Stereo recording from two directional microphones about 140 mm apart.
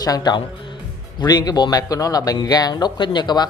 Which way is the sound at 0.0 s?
30° left (ahead or behind).